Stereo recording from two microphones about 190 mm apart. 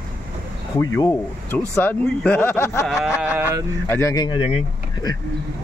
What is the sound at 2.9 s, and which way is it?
Speech, centre (ahead or behind).